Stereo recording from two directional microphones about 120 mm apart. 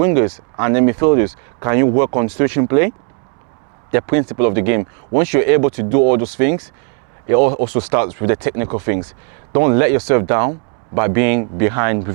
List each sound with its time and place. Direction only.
0.0 s speech: 20° right (ahead or behind)
3.9 s speech: 25° right (ahead or behind)